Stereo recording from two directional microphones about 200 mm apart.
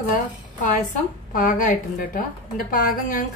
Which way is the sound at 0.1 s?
40° left (ahead or behind).